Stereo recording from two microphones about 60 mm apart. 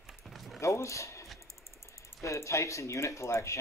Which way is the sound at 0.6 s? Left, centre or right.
Left.